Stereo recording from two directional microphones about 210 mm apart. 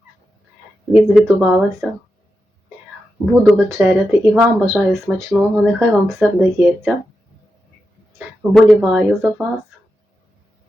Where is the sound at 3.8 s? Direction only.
5° right (ahead or behind).